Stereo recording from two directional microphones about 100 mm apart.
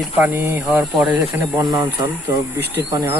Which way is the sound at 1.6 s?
30° right (ahead or behind).